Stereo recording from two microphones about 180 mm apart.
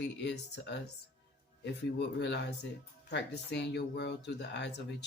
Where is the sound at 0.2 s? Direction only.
75° left (ahead or behind).